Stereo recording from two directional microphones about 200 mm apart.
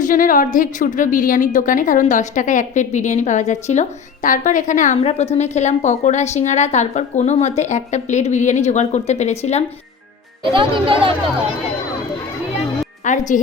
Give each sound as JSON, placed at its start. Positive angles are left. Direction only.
{"t": 0.0, "sound": "a woman's voice", "side_deg": 40}
{"t": 10.4, "sound": "a child's voice", "side_deg": -25}
{"t": 13.1, "sound": "a woman's voice", "side_deg": 40}